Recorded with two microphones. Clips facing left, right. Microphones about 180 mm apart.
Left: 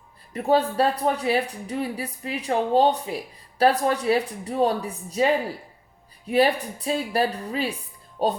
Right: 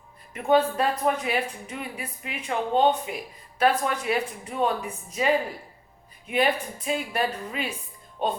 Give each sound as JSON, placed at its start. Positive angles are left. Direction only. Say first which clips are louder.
{"t": 0.3, "sound": "a woman's voice", "louder": "left 1 dB", "side_deg": 35}